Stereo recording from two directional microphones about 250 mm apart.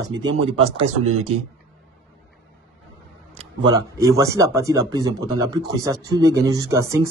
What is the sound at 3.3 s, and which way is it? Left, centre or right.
Speech, centre.